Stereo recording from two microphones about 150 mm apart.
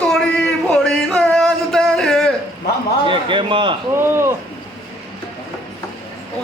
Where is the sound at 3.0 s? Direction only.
35° right (ahead or behind).